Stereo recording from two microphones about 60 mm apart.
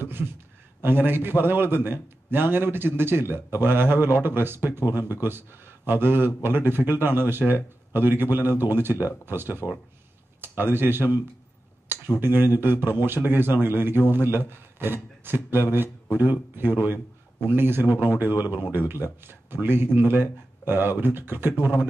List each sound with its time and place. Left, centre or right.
0.8 s a man's voice: right
12.2 s a man's voice: right